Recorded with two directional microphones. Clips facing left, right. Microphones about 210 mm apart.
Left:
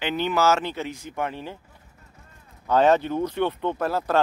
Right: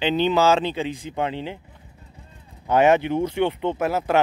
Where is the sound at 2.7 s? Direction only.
15° right (ahead or behind).